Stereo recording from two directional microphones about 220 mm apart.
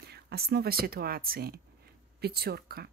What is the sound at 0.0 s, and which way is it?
Speech, 45° right (ahead or behind).